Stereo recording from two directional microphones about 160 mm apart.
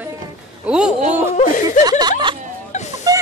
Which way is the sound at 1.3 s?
55° left (ahead or behind).